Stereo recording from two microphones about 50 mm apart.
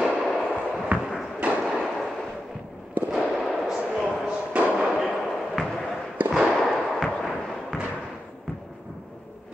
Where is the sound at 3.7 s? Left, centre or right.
Centre.